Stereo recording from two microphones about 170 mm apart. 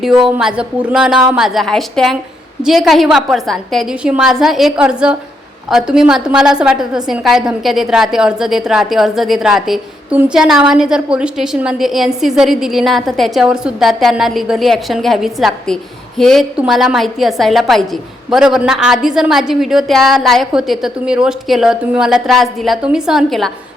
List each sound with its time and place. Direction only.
0.0 s a woman's voice: centre (ahead or behind)